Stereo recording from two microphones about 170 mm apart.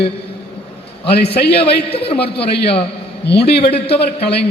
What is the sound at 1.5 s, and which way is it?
A man's voice, 35° left (ahead or behind).